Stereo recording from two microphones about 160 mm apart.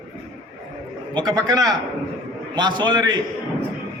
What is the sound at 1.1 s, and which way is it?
A man's voice, 25° right (ahead or behind).